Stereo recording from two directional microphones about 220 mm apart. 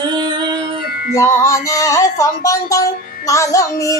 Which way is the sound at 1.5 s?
15° left (ahead or behind).